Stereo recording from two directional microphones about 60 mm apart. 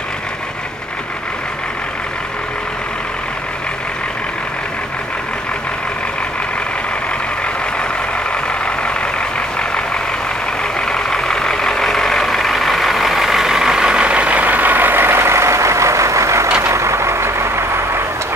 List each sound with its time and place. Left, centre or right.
8.5 s vehicle: centre
10.6 s vehicle: centre; by 18.0 s right